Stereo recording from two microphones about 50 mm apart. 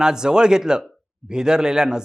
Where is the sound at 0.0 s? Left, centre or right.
Centre.